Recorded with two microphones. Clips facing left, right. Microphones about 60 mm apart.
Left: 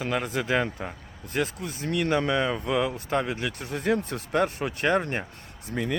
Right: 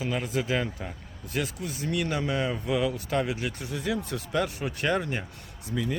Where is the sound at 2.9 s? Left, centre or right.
Left.